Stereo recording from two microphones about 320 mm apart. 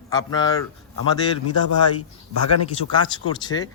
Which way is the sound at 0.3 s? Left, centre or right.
Centre.